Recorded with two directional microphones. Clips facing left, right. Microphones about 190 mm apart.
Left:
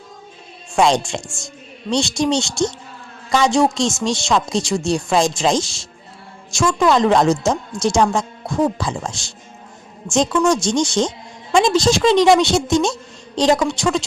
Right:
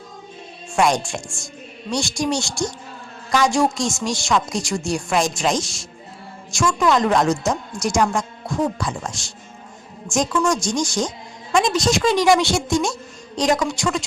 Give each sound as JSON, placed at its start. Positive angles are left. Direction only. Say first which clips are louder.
{"t": 0.8, "sound": "speech", "louder": "left 3 dB", "side_deg": 25}